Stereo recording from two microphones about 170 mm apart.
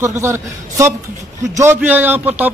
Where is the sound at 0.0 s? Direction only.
15° right (ahead or behind).